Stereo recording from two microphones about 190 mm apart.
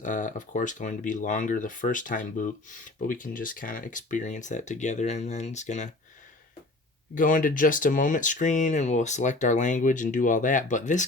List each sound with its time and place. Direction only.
0.0 s speech: 40° left (ahead or behind)
7.2 s speech: 45° left (ahead or behind)